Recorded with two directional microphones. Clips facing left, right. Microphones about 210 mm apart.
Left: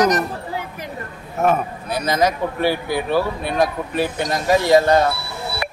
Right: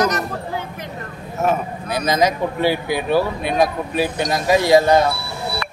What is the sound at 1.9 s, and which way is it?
Speech, 15° right (ahead or behind).